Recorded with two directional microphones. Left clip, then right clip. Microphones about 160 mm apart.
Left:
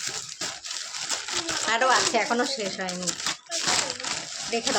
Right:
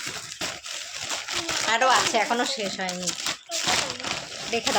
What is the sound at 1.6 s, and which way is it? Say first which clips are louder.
Speech: right 1 dB; 5° left (ahead or behind).